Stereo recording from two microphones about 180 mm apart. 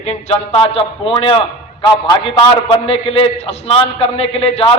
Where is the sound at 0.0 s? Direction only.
40° left (ahead or behind).